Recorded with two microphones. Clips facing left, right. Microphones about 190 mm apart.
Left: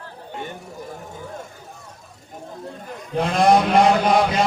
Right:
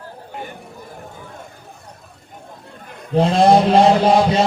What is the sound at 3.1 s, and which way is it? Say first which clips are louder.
Mantra: right 4 dB; 30° right (ahead or behind).